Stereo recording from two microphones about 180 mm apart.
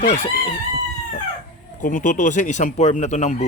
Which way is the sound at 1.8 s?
50° left (ahead or behind).